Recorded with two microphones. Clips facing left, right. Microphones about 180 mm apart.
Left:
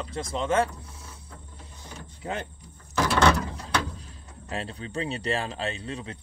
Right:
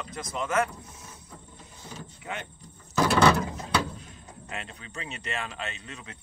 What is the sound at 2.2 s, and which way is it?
Speech, 35° left (ahead or behind).